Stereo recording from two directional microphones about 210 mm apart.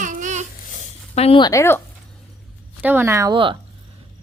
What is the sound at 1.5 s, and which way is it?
Speech, 10° left (ahead or behind).